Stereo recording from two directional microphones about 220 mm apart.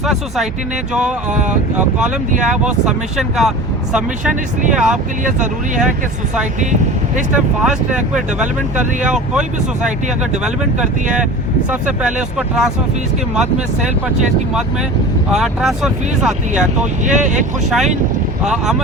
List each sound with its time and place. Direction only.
0.0 s speech: centre (ahead or behind)
1.3 s speech: 35° right (ahead or behind)
2.4 s speech: 5° right (ahead or behind)
4.7 s speech: 5° right (ahead or behind)
5.2 s speech: 35° right (ahead or behind)
7.3 s speech: 5° right (ahead or behind)
15.3 s speech: centre (ahead or behind)
17.1 s speech: 35° right (ahead or behind)
18.4 s speech: centre (ahead or behind)